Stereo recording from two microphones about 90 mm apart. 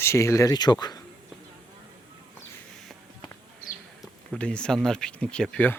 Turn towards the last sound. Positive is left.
turn(degrees=10)  # may be behind; listen again after turning